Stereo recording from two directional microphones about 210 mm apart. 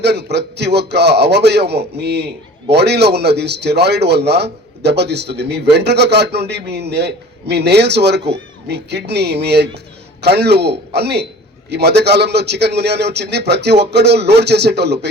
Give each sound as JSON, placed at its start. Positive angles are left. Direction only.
{"t": 0.0, "sound": "a man's voice", "side_deg": -50}